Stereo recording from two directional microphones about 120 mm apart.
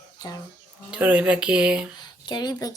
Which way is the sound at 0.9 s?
10° right (ahead or behind).